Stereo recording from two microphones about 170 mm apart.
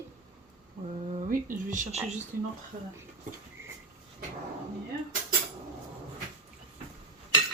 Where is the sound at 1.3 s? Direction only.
50° right (ahead or behind).